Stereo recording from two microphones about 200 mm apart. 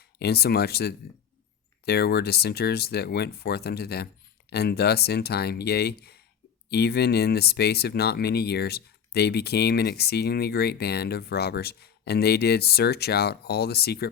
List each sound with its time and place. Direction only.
0.2 s speech: 55° left (ahead or behind)